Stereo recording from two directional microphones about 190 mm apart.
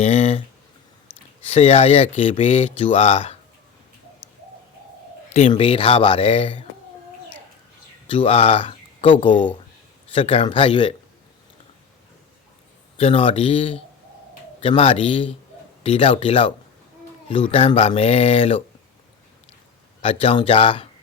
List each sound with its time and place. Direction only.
0.0 s a sound: 35° left (ahead or behind)
1.5 s speech: 35° left (ahead or behind)
5.3 s speech: 35° left (ahead or behind)
8.1 s speech: 30° left (ahead or behind)
13.0 s speech: 30° left (ahead or behind)
20.0 s speech: 30° left (ahead or behind)